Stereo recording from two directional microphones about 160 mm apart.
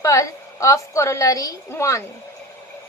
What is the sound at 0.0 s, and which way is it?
A woman's voice, 20° left (ahead or behind).